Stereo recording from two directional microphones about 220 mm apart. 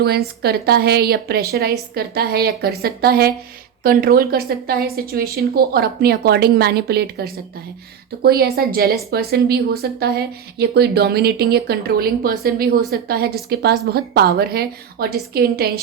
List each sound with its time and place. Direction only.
0.0 s a woman's voice: 45° right (ahead or behind)